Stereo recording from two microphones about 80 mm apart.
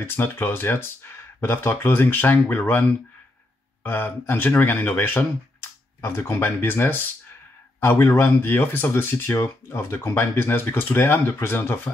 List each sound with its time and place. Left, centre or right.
0.0 s speech: left